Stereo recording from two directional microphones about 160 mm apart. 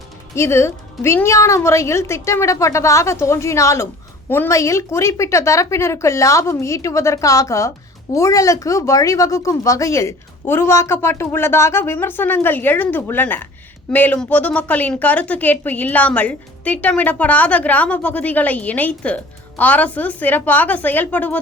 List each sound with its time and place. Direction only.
0.3 s a woman's voice: 15° left (ahead or behind)